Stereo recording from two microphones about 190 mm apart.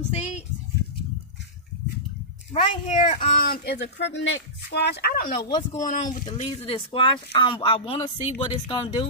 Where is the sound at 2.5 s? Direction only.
40° left (ahead or behind).